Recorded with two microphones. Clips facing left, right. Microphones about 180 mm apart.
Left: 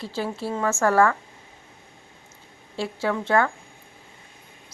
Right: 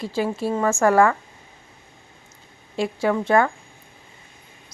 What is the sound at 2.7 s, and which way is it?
Speech, 15° right (ahead or behind).